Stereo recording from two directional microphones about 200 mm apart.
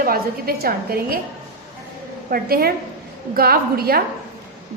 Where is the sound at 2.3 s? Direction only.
50° right (ahead or behind).